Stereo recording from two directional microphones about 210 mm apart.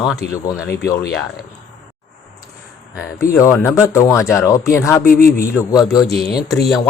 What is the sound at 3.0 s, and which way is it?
Speech, 15° left (ahead or behind).